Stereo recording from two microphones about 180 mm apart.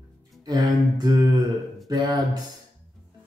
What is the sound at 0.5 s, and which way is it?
Speech, 20° right (ahead or behind).